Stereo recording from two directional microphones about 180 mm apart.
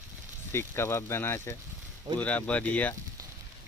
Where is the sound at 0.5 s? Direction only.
15° left (ahead or behind).